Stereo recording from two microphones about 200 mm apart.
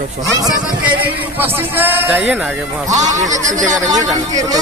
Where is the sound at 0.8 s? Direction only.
10° right (ahead or behind).